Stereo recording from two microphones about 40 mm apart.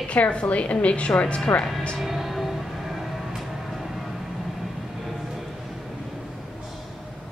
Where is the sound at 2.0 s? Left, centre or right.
Centre.